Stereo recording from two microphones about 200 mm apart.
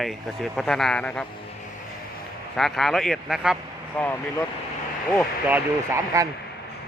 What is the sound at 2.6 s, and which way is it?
Speech, centre (ahead or behind).